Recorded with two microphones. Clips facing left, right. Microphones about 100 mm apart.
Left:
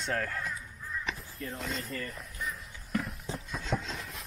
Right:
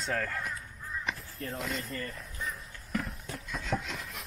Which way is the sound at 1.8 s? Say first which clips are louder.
Even; centre (ahead or behind).